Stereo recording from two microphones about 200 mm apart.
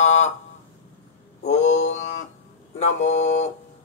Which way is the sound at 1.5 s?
35° left (ahead or behind).